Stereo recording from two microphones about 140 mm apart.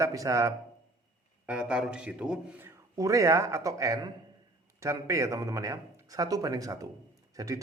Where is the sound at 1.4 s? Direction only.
5° right (ahead or behind).